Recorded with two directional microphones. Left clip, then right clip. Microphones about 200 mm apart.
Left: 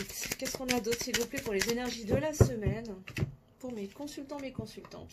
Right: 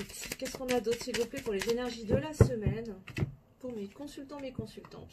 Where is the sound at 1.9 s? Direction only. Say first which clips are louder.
Even; 35° left (ahead or behind).